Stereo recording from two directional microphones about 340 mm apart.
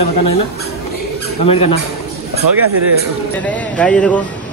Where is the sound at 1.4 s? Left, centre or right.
Centre.